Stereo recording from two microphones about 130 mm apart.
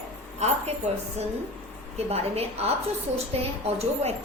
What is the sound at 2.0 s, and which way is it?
A woman's voice, 55° right (ahead or behind).